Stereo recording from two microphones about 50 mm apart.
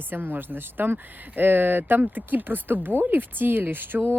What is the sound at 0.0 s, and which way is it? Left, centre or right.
Speech, right.